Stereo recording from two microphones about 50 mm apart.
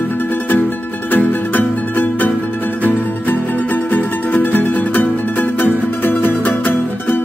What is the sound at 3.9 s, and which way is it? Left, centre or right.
Music, left.